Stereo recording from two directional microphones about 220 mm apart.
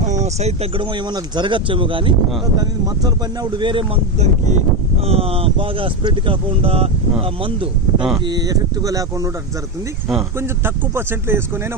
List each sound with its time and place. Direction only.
0.0 s speech: 30° right (ahead or behind); by 9.3 s 15° right (ahead or behind)
10.3 s speech: 10° right (ahead or behind)